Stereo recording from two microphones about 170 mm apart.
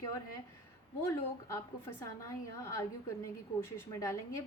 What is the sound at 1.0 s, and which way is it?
A woman's voice, 15° left (ahead or behind).